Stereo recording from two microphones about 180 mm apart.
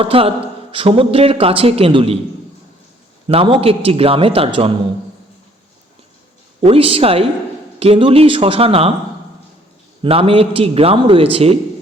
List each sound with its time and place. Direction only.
0.0 s a man's voice: 30° right (ahead or behind)
3.2 s a man's voice: 30° right (ahead or behind)
6.7 s a man's voice: 30° right (ahead or behind)
10.0 s a man's voice: 30° right (ahead or behind)